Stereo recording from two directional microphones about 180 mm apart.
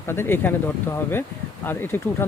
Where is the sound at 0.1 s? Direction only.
10° left (ahead or behind).